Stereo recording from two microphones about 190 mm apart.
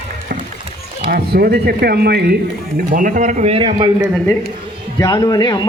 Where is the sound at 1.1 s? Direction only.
55° right (ahead or behind).